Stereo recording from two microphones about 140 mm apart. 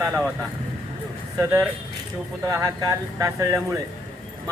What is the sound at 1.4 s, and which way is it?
Speech, 15° right (ahead or behind).